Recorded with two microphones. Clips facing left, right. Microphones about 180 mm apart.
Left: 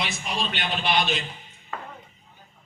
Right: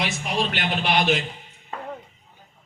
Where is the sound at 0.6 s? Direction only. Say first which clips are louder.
Left 1 dB; 70° right (ahead or behind).